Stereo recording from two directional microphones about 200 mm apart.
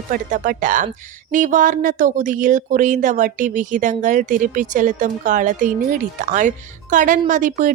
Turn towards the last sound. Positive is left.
turn(degrees=-40)  # may be behind; listen again after turning